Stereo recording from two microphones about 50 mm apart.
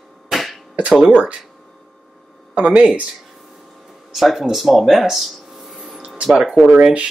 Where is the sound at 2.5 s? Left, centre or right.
Right.